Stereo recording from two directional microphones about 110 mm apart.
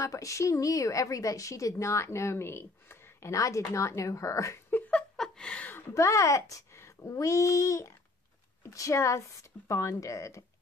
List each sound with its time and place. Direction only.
0.0 s a woman's voice: 30° left (ahead or behind)
5.1 s a sound: 5° left (ahead or behind)
5.9 s a woman's voice: 25° left (ahead or behind)